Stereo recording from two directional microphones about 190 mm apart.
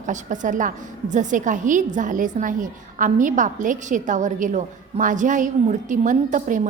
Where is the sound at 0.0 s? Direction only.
40° right (ahead or behind).